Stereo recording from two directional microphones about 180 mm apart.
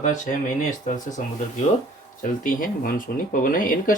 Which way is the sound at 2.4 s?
50° left (ahead or behind).